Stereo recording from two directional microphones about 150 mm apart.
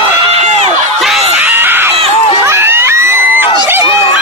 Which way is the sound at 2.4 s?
15° right (ahead or behind).